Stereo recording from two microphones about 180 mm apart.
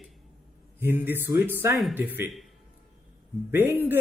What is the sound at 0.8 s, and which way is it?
A man's voice, 10° right (ahead or behind).